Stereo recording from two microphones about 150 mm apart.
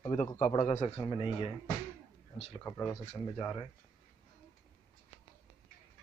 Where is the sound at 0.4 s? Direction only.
50° left (ahead or behind).